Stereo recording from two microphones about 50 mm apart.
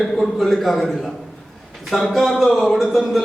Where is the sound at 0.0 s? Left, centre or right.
Centre.